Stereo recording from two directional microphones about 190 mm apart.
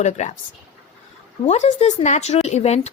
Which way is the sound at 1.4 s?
35° left (ahead or behind).